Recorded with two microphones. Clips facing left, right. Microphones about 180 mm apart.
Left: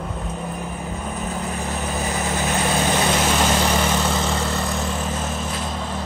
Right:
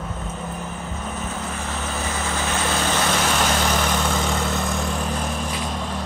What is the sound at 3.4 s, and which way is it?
Vehicle, 5° left (ahead or behind).